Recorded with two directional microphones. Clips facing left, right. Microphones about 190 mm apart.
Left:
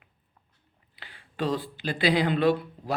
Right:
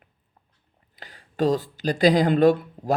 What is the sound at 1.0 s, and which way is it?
Speech, 40° right (ahead or behind).